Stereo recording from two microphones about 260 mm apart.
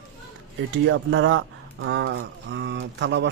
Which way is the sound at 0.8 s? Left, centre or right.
Right.